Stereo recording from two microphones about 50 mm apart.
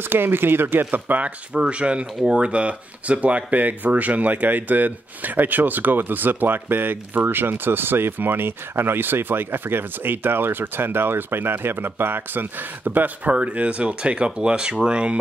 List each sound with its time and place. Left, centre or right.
0.0 s speech: right
1.5 s speech: right